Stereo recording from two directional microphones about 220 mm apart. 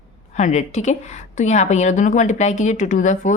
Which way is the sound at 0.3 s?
30° left (ahead or behind).